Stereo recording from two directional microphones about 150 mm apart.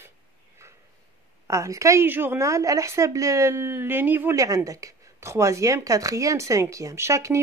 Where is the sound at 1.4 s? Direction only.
20° right (ahead or behind).